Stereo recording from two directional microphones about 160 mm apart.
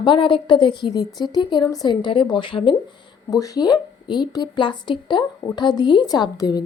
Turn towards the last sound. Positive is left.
turn(degrees=25)  # may be behind; listen again after turning